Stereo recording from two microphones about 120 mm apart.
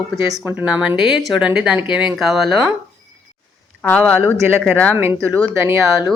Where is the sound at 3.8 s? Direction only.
10° left (ahead or behind).